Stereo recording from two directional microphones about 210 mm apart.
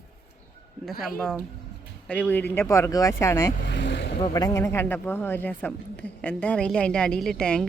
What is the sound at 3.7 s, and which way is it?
Vehicle, 55° left (ahead or behind).